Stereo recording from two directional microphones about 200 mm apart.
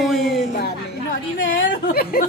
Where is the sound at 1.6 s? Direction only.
65° left (ahead or behind); by 2.2 s 45° left (ahead or behind).